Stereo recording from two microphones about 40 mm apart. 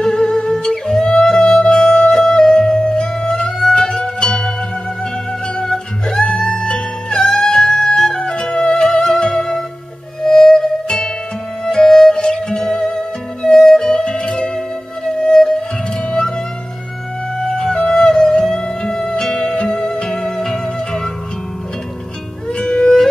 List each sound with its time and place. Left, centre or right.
0.0 s music: centre
3.7 s zither: centre
6.0 s music: centre
17.4 s music: centre
22.6 s music: centre